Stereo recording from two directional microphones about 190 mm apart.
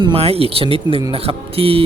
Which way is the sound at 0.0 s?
30° right (ahead or behind).